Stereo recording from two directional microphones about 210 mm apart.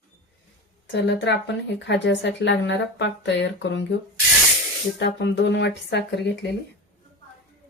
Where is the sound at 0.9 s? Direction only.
60° left (ahead or behind).